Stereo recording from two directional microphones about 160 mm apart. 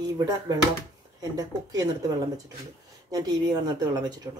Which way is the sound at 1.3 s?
20° right (ahead or behind).